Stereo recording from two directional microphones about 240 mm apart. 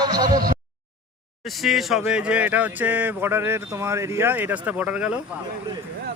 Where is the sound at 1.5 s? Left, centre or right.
Centre.